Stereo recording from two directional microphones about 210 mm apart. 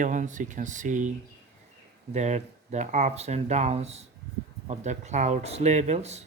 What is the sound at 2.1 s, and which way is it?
Speech, 35° right (ahead or behind).